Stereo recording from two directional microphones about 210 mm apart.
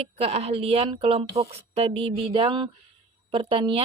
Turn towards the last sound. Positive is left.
turn(degrees=-25)  # may be behind; listen again after turning